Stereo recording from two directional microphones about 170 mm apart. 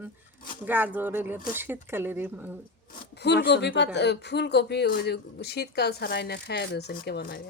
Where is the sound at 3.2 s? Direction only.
80° left.